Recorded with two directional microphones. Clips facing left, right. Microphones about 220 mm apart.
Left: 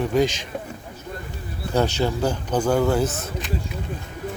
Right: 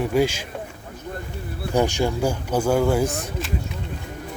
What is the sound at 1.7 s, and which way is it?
Speech, 15° right (ahead or behind).